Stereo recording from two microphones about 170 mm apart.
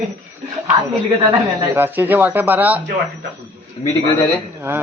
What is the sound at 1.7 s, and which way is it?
Speech, 10° right (ahead or behind).